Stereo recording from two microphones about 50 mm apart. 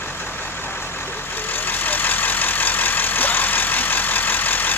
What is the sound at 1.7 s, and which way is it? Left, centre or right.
Vehicle, left.